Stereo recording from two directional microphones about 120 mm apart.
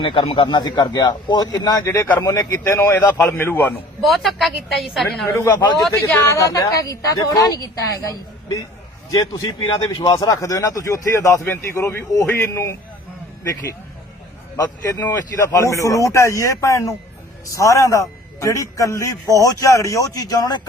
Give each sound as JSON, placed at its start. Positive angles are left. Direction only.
{"t": 0.0, "sound": "a man's voice", "side_deg": 45}
{"t": 4.0, "sound": "a woman's voice", "side_deg": 0}
{"t": 6.1, "sound": "a man's voice", "side_deg": 25}
{"t": 9.0, "sound": "a man's voice", "side_deg": 30}